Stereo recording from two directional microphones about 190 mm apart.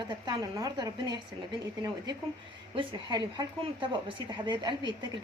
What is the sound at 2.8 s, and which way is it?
A woman's voice, 25° right (ahead or behind).